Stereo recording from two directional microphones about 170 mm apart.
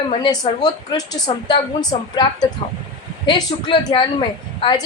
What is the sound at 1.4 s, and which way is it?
A woman's voice, 25° left (ahead or behind).